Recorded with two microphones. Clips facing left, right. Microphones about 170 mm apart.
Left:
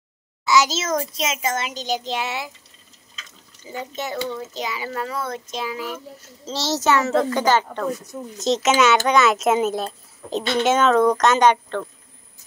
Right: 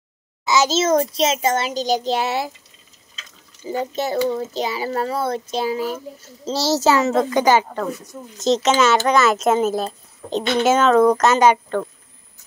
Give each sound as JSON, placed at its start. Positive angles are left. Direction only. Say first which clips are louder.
{"t": 0.5, "sound": "a child's voice", "louder": "right 3 dB", "side_deg": -25}
{"t": 3.6, "sound": "a child's voice", "louder": "right 7 dB", "side_deg": -35}
{"t": 7.1, "sound": "a child's voice", "louder": "right 2 dB", "side_deg": -15}